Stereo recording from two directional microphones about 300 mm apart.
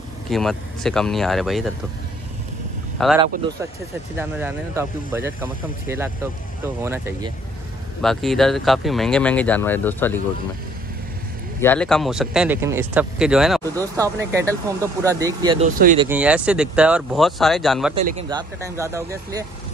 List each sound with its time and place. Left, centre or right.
0.3 s speech: centre
4.2 s speech: centre
8.0 s speech: centre
11.6 s speech: centre
17.9 s a man's voice: right
18.6 s speech: centre